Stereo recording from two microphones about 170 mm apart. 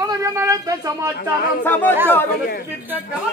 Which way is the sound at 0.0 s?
20° right (ahead or behind).